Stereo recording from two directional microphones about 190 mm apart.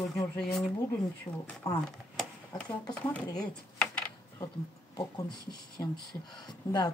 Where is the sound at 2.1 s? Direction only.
5° left (ahead or behind).